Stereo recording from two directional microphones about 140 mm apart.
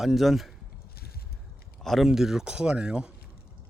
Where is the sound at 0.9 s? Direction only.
90° left.